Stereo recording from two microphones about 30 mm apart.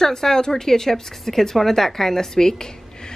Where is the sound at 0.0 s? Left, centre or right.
Centre.